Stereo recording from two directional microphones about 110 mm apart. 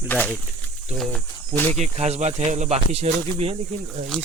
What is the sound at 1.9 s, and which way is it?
Speech, 85° right.